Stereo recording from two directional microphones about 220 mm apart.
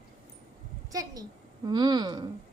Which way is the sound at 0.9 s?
15° right (ahead or behind).